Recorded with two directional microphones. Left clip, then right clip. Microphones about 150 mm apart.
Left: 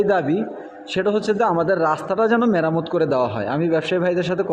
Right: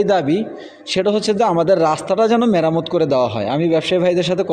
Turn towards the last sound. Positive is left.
turn(degrees=-30)  # may be behind; listen again after turning